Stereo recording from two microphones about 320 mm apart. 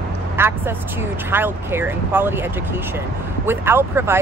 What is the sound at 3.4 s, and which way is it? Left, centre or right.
Speech, centre.